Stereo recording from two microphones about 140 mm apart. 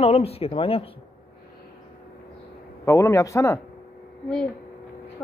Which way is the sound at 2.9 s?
20° left (ahead or behind).